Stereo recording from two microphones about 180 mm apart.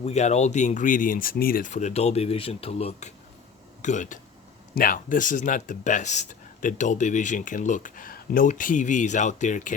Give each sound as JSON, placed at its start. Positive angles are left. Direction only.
{"t": 0.0, "sound": "speech", "side_deg": 40}